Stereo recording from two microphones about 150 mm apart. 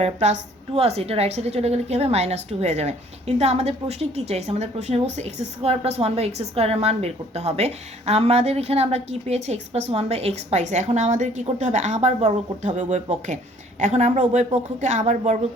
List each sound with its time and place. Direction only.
0.0 s a woman's voice: 45° right (ahead or behind)